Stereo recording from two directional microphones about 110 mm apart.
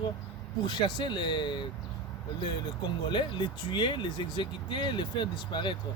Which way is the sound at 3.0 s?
45° left (ahead or behind).